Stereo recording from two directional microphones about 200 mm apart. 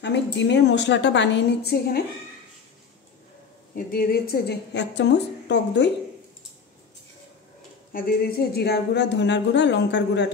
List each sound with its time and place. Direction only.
0.0 s a woman's voice: 60° left (ahead or behind)
3.7 s a woman's voice: 45° left (ahead or behind)
7.9 s a woman's voice: 50° left (ahead or behind)